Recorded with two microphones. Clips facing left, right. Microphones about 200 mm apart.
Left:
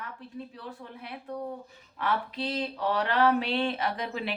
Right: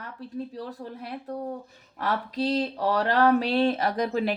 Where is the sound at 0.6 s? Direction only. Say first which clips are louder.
Right 6 dB; 40° right (ahead or behind).